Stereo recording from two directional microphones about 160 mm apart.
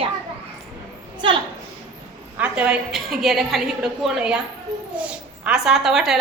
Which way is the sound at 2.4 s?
5° right (ahead or behind).